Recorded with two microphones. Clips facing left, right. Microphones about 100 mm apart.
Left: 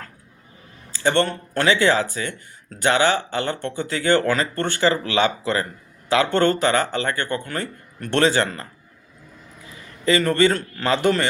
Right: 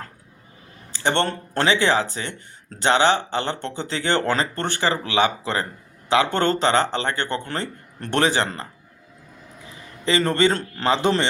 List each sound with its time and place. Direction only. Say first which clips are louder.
0.9 s speech: left 2 dB; 25° right (ahead or behind)
10.1 s speech: left 2 dB; 25° right (ahead or behind)